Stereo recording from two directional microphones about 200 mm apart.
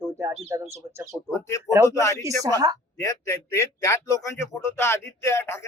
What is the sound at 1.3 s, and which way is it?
A man's voice, 15° left (ahead or behind).